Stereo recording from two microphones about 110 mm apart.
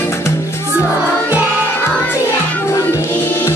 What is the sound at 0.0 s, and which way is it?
Music, 25° left (ahead or behind).